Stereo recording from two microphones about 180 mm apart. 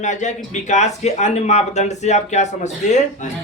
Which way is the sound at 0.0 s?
40° left (ahead or behind).